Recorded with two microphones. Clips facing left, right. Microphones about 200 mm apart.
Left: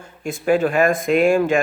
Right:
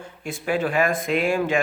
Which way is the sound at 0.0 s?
45° left (ahead or behind).